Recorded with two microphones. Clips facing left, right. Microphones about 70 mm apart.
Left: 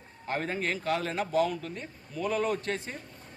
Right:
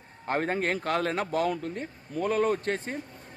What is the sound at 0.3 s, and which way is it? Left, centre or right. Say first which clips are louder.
A man's voice: right 4 dB; right.